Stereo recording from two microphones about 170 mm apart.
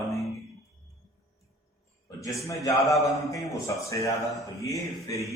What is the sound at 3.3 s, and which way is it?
A man's voice, 20° left (ahead or behind).